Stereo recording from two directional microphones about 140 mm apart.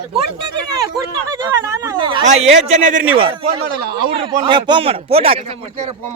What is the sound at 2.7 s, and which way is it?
Speech, 65° right (ahead or behind).